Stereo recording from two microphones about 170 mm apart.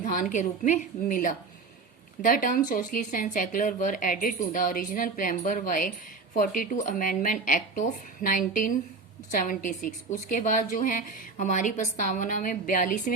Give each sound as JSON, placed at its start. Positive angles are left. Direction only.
{"t": 0.0, "sound": "speech", "side_deg": 50}